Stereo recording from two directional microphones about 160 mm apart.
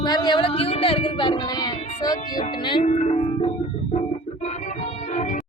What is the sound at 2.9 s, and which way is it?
Organ, 45° left (ahead or behind).